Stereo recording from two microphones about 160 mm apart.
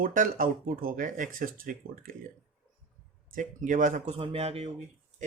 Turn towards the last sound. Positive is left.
turn(degrees=-40)  # may be behind; listen again after turning